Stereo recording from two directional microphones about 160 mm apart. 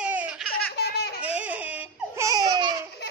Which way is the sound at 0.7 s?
85° left.